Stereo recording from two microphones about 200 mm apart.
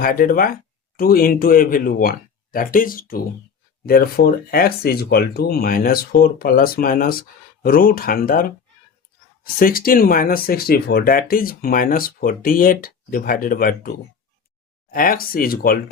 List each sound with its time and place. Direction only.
0.0 s speech: 45° left (ahead or behind)